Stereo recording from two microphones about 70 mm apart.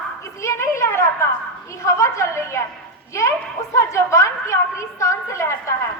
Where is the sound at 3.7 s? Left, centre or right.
Left.